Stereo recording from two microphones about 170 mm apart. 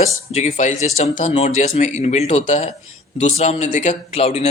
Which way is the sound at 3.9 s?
35° left (ahead or behind).